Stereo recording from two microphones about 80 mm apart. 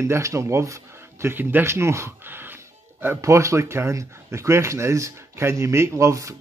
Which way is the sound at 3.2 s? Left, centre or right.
Right.